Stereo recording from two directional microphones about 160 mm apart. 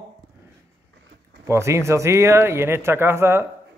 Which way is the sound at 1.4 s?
15° right (ahead or behind).